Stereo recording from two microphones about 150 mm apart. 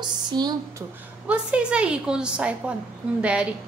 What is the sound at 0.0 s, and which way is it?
Speech, 30° right (ahead or behind).